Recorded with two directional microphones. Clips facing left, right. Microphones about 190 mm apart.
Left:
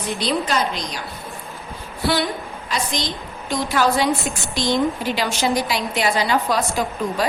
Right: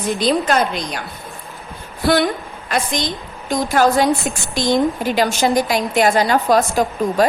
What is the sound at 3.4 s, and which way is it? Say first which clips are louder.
A woman's voice: right 4 dB; 45° right (ahead or behind).